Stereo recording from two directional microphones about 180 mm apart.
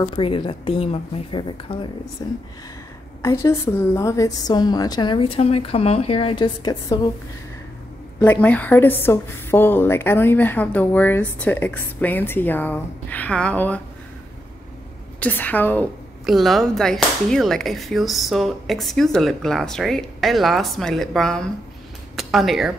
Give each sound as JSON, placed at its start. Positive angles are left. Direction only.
{"t": 0.0, "sound": "a woman's voice", "side_deg": 30}
{"t": 3.2, "sound": "a woman's voice", "side_deg": 15}
{"t": 8.2, "sound": "a woman's voice", "side_deg": 10}
{"t": 15.1, "sound": "a woman's voice", "side_deg": 10}
{"t": 22.1, "sound": "a sound", "side_deg": 0}